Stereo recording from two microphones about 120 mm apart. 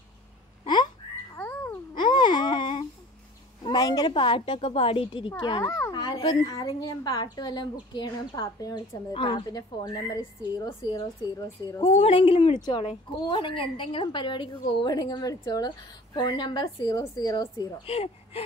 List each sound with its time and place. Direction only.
1.3 s a sound: 15° left (ahead or behind)
2.0 s baby cry: 40° left (ahead or behind)
3.6 s a sound: 30° left (ahead or behind)
4.1 s a woman's voice: 45° left (ahead or behind)
5.4 s a woman's voice: 35° left (ahead or behind)
9.1 s a woman's voice: 45° left (ahead or behind)
9.5 s a woman's voice: 35° left (ahead or behind)
11.8 s a woman's voice: 60° left (ahead or behind)
13.2 s a woman's voice: 40° left (ahead or behind)
17.8 s speech: 55° left (ahead or behind)